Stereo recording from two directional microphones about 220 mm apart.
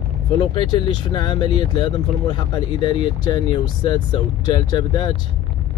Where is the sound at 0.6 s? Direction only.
20° left (ahead or behind).